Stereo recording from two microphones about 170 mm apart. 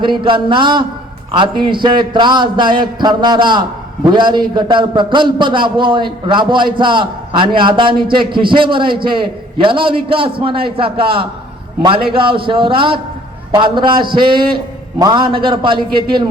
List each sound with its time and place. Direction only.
0.0 s a man's voice: 30° right (ahead or behind)